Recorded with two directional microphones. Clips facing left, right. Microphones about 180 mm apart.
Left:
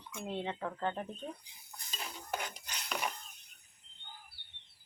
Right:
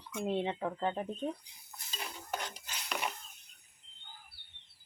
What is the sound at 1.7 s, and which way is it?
Cutlery, 5° right (ahead or behind).